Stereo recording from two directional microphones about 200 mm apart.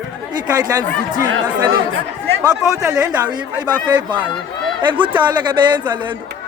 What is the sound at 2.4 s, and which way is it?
A man's voice, 15° right (ahead or behind).